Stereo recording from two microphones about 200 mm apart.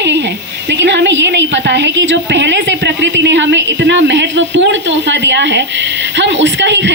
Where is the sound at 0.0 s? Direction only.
60° right (ahead or behind).